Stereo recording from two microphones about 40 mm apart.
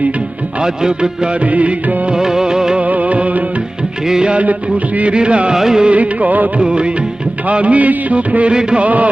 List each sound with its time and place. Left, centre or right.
0.6 s music of bollywood: centre
1.5 s music of bollywood: right
2.1 s music of bollywood: centre
2.7 s music of bollywood: right
5.5 s music of bollywood: centre
5.8 s music of bollywood: right
6.6 s music of bollywood: right